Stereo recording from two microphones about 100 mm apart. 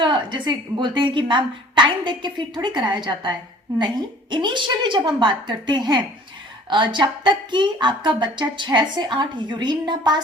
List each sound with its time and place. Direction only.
0.0 s a woman's voice: 50° right (ahead or behind)